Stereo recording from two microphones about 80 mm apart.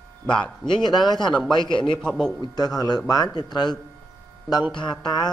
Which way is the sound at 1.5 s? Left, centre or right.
Left.